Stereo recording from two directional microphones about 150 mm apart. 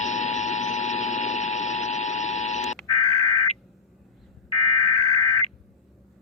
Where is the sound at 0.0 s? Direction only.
55° left (ahead or behind).